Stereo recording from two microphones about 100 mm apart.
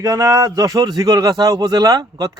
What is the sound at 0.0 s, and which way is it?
A man's voice, 35° right (ahead or behind).